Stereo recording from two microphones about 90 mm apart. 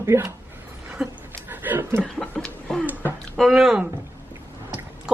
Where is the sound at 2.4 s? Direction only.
10° left (ahead or behind).